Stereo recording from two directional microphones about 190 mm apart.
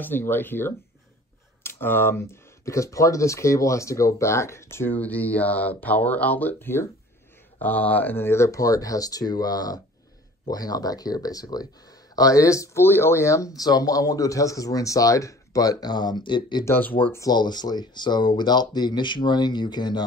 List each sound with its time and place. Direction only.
0.0 s speech: 10° left (ahead or behind)
16.6 s speech: 10° left (ahead or behind)